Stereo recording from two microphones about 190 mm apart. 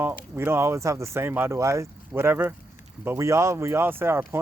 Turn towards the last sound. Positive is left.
turn(degrees=-15)  # may be behind; listen again after turning